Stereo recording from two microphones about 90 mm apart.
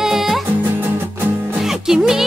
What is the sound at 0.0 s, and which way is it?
Music, 5° right (ahead or behind).